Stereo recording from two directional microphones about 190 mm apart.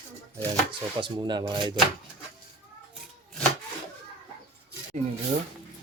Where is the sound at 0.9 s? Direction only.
25° right (ahead or behind).